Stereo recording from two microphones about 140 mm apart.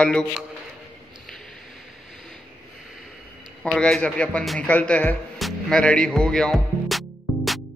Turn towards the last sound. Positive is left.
turn(degrees=0)  # may be behind; listen again after turning